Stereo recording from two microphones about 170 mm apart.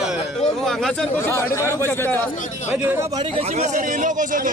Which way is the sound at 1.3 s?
15° left (ahead or behind).